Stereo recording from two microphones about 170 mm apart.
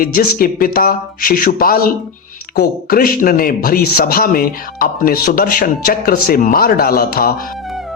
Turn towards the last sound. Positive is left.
turn(degrees=60)  # may be behind; listen again after turning